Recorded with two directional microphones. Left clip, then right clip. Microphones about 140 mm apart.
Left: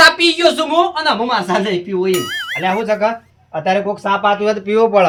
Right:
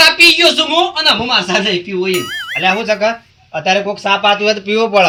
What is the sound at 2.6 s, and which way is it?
A man's voice, 25° left (ahead or behind).